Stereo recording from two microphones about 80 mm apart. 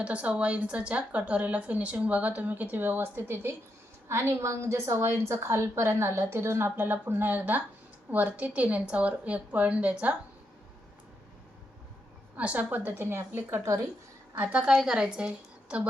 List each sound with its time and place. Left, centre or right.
0.0 s a woman's voice: centre
12.4 s a woman's voice: centre
14.8 s a woman's voice: centre